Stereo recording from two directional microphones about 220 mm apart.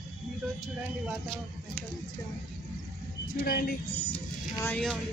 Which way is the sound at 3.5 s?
45° left (ahead or behind).